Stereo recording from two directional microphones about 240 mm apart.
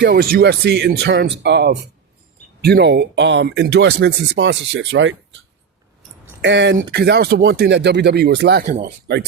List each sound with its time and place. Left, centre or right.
0.0 s speech: right